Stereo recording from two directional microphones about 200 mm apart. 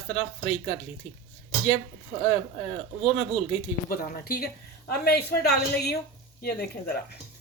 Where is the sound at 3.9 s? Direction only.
50° left (ahead or behind).